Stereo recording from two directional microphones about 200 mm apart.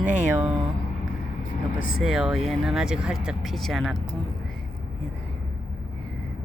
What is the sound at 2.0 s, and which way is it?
Speech, 5° right (ahead or behind).